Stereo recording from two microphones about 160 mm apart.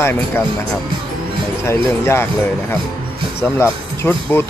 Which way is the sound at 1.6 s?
15° left (ahead or behind).